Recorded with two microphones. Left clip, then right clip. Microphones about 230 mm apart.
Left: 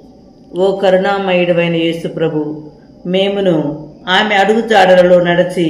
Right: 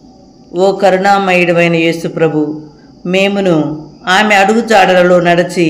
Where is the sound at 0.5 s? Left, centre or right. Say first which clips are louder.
Right 2 dB; right.